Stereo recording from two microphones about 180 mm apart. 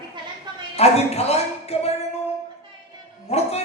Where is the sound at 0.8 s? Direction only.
35° left (ahead or behind).